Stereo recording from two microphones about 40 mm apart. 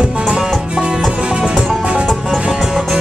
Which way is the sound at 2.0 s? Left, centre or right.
Centre.